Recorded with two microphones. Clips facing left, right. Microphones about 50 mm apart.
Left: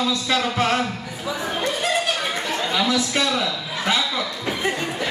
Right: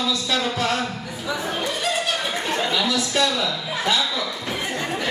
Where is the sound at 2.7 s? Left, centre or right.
Left.